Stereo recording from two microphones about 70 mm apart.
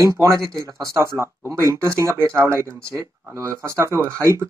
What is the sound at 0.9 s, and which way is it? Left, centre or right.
Speech, right.